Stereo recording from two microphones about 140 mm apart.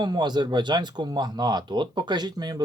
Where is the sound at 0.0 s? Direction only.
30° right (ahead or behind).